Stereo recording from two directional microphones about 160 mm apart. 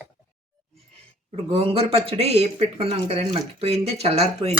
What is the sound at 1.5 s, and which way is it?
Speech, 35° right (ahead or behind).